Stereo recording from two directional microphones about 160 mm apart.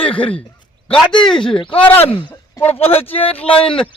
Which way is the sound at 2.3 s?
15° left (ahead or behind).